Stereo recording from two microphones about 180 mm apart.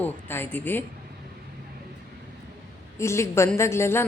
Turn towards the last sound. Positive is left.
turn(degrees=15)  # may be behind; listen again after turning